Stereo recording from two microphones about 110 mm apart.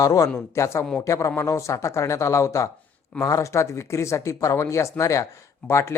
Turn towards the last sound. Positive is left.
turn(degrees=25)  # may be behind; listen again after turning